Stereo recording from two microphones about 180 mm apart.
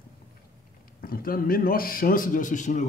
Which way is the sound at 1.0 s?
55° left (ahead or behind).